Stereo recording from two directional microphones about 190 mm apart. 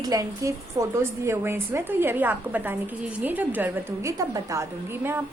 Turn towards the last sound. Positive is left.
turn(degrees=-10)  # may be behind; listen again after turning